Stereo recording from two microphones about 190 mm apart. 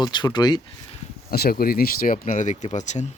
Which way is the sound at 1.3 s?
55° left (ahead or behind).